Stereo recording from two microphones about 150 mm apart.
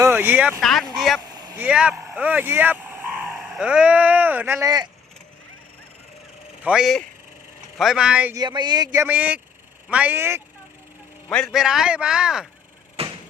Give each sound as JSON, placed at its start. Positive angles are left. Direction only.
{"t": 0.0, "sound": "speech", "side_deg": -15}
{"t": 0.6, "sound": "a man's voice", "side_deg": 0}
{"t": 1.2, "sound": "a sound", "side_deg": -25}
{"t": 1.5, "sound": "speech", "side_deg": -10}
{"t": 6.6, "sound": "a man's voice", "side_deg": -5}
{"t": 8.4, "sound": "speech", "side_deg": -30}
{"t": 9.0, "sound": "speech", "side_deg": -10}
{"t": 11.3, "sound": "a man's voice", "side_deg": 5}
{"t": 13.0, "sound": "vehicle", "side_deg": -40}